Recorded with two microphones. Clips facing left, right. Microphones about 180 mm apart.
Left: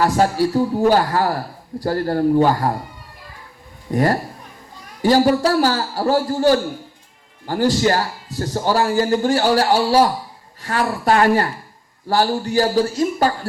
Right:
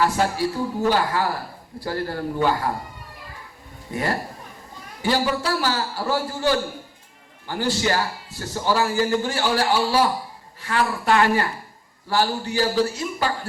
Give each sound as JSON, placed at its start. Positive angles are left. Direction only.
{"t": 0.0, "sound": "a man's voice", "side_deg": 40}
{"t": 3.9, "sound": "a man's voice", "side_deg": 40}